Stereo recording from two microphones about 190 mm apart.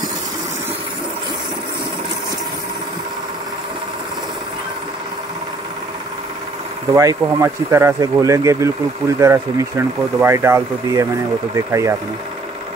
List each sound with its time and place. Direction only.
7.0 s speech: 15° right (ahead or behind)